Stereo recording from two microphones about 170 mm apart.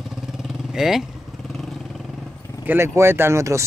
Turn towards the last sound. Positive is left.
turn(degrees=-15)  # may be behind; listen again after turning